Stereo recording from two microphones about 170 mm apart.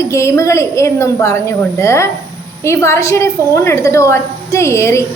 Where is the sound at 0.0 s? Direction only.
15° left (ahead or behind).